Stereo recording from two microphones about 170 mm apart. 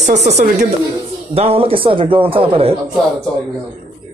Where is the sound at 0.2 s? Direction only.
45° right (ahead or behind).